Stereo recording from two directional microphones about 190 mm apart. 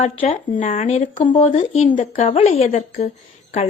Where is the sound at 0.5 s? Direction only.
40° left (ahead or behind).